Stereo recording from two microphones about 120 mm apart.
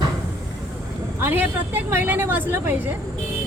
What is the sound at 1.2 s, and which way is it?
Speech, 15° right (ahead or behind).